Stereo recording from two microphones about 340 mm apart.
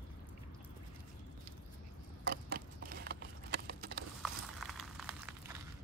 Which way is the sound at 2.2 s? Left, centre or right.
Right.